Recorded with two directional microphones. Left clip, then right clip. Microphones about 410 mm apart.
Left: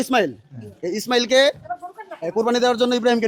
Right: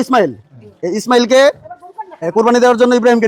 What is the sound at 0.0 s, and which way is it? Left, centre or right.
A man's voice, centre.